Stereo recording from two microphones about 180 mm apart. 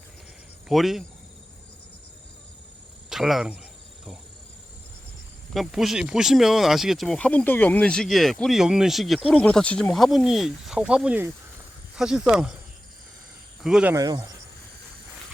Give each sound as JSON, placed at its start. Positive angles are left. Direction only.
{"t": 0.7, "sound": "speech", "side_deg": 0}
{"t": 3.1, "sound": "speech", "side_deg": 0}
{"t": 5.5, "sound": "speech", "side_deg": 0}
{"t": 13.6, "sound": "speech", "side_deg": -5}
{"t": 13.9, "sound": "speech", "side_deg": -20}